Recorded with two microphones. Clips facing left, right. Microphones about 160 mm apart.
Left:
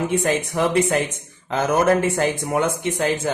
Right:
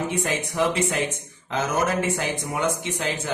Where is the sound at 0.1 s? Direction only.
55° left (ahead or behind).